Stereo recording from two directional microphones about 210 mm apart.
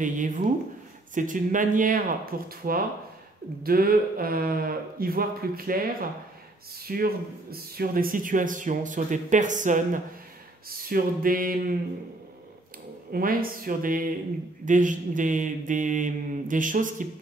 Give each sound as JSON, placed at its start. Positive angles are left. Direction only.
{"t": 0.0, "sound": "speech", "side_deg": -40}
{"t": 6.9, "sound": "speech", "side_deg": -45}
{"t": 10.8, "sound": "speech", "side_deg": -45}
{"t": 13.1, "sound": "speech", "side_deg": -45}